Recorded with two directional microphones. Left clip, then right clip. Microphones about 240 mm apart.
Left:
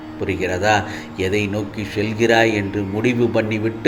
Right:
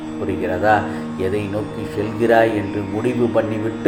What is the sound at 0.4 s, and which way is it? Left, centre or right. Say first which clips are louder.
Speech: right 1 dB; left.